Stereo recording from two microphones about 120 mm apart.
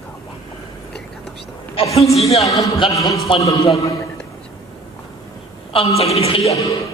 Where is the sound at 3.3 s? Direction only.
45° left (ahead or behind).